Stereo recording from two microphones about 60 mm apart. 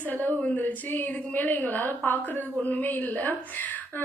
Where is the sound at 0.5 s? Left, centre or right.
Left.